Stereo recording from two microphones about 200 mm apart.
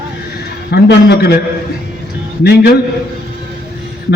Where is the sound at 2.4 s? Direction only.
55° left (ahead or behind).